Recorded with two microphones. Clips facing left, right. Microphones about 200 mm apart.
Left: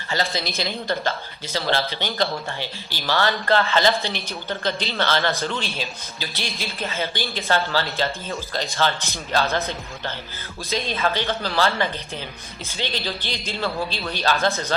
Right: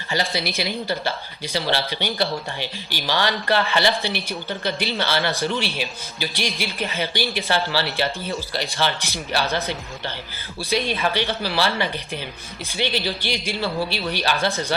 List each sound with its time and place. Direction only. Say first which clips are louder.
0.1 s speech: right 1 dB; 10° right (ahead or behind)
10.6 s speech: right 2 dB; 15° right (ahead or behind)